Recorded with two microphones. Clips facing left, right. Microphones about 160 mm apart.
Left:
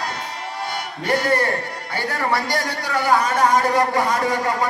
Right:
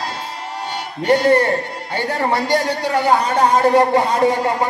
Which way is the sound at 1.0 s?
35° right (ahead or behind).